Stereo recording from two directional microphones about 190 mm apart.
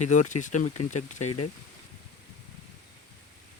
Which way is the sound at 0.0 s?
40° left (ahead or behind).